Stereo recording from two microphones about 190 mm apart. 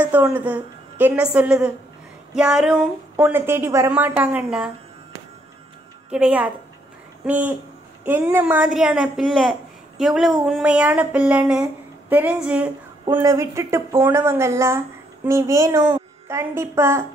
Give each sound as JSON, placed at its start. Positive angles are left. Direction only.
{"t": 0.0, "sound": "a woman's voice", "side_deg": -10}
{"t": 6.0, "sound": "a woman's voice", "side_deg": -5}
{"t": 13.1, "sound": "a woman's voice", "side_deg": -15}